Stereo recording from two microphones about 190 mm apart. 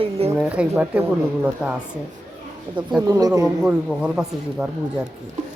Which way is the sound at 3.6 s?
5° right (ahead or behind).